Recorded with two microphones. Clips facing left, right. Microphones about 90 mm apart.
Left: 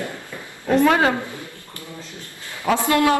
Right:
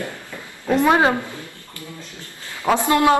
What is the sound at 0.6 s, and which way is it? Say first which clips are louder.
Speech: even; 20° right (ahead or behind).